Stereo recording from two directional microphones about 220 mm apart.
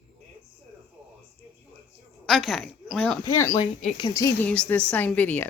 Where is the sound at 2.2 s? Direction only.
Centre (ahead or behind).